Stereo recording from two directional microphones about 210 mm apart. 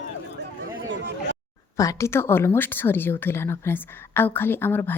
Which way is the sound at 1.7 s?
15° left (ahead or behind).